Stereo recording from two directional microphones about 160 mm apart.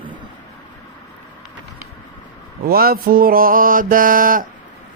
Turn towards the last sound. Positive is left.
turn(degrees=-60)  # may be behind; listen again after turning